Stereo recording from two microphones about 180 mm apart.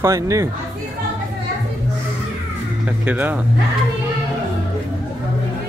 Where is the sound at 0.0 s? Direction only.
15° right (ahead or behind).